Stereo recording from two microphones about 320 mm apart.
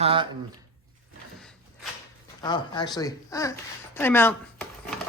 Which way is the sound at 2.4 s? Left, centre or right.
Centre.